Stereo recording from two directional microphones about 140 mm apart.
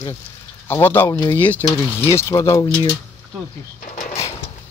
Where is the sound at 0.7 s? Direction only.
15° left (ahead or behind).